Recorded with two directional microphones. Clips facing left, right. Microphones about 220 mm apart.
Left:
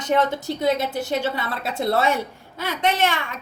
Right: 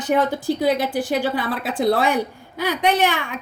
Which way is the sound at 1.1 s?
Centre (ahead or behind).